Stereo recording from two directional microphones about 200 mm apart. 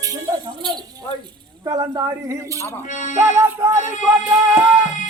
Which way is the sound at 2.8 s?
40° left (ahead or behind).